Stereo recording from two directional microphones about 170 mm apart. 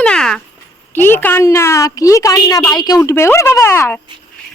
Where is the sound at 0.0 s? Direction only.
5° left (ahead or behind).